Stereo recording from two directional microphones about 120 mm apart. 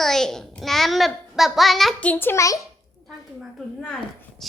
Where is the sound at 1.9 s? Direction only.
15° left (ahead or behind).